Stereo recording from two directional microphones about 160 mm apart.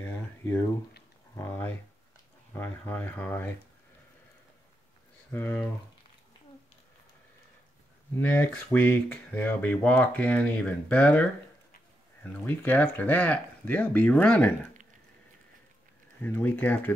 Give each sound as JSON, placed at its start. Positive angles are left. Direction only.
{"t": 0.0, "sound": "a sound", "side_deg": 15}
{"t": 2.5, "sound": "speech", "side_deg": 10}
{"t": 5.3, "sound": "speech", "side_deg": 10}
{"t": 8.2, "sound": "speech", "side_deg": 10}
{"t": 16.2, "sound": "speech", "side_deg": 10}